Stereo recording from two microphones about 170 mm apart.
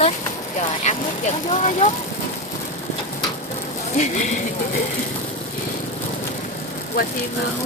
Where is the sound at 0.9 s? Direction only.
45° left (ahead or behind).